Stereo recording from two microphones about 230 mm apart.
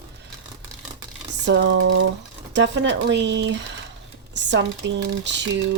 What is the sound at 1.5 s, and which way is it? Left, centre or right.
Speech, right.